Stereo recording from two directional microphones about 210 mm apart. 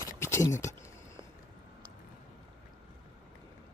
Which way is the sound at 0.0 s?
15° left (ahead or behind).